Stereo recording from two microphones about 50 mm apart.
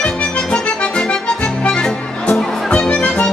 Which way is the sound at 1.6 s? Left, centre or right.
Left.